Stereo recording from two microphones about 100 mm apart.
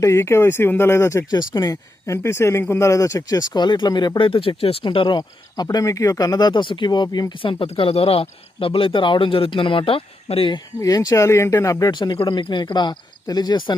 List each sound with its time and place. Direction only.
0.0 s speech: 30° left (ahead or behind)
1.3 s speech: 40° left (ahead or behind)
4.3 s speech: 65° left (ahead or behind); by 5.6 s 45° left (ahead or behind)
5.6 s speech: 35° left (ahead or behind); by 10.5 s 70° left (ahead or behind)
10.8 s speech: 35° left (ahead or behind)
11.9 s speech: 45° left (ahead or behind)